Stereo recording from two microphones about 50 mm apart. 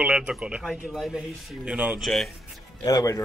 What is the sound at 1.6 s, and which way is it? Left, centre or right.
Speech, right.